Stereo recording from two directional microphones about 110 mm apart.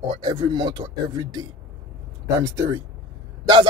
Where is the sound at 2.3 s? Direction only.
30° right (ahead or behind).